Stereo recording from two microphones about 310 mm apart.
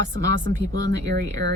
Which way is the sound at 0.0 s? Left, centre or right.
Right.